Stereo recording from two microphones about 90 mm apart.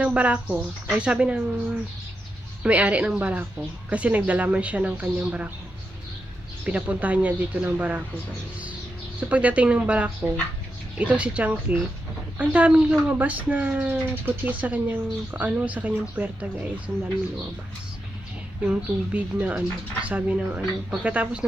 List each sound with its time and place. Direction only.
0.0 s speech: 15° right (ahead or behind)
2.6 s speech: 15° right (ahead or behind)
6.7 s speech: 15° right (ahead or behind)
9.3 s speech: 15° right (ahead or behind)
18.6 s speech: 15° right (ahead or behind)